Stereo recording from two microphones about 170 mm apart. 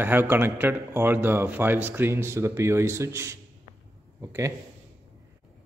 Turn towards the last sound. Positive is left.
turn(degrees=-20)  # may be behind; listen again after turning